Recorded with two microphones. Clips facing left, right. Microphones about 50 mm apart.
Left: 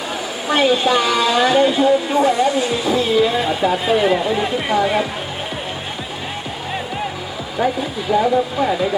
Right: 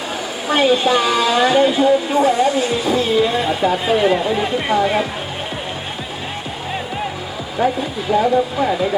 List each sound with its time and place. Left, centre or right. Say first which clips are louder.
0.4 s speech: right 1 dB; centre
7.6 s speech: right 1 dB; centre